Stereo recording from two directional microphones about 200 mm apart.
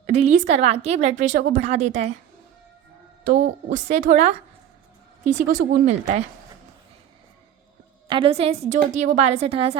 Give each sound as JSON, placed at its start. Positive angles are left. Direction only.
{"t": 0.0, "sound": "a woman's voice", "side_deg": -35}
{"t": 3.2, "sound": "a woman's voice", "side_deg": -40}
{"t": 5.5, "sound": "a woman's voice", "side_deg": -40}
{"t": 8.0, "sound": "a woman's voice", "side_deg": -25}